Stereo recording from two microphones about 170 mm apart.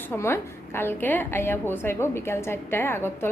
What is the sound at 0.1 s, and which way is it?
A woman's voice, 15° left (ahead or behind).